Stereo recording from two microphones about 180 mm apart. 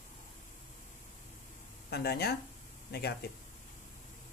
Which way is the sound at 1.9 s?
60° left (ahead or behind).